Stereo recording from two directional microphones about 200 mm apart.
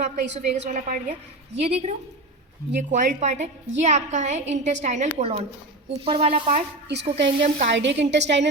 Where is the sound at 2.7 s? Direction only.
40° right (ahead or behind).